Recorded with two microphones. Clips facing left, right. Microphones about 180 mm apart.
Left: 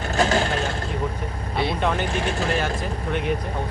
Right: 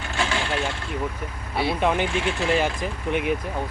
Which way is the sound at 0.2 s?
40° left (ahead or behind).